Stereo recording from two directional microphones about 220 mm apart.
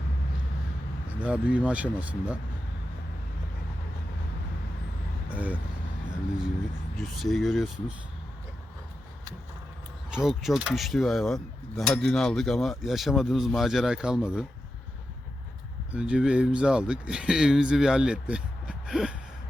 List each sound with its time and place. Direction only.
1.0 s speech: 5° right (ahead or behind)
7.2 s speech: centre (ahead or behind)
10.1 s speech: centre (ahead or behind)
15.9 s speech: 5° right (ahead or behind)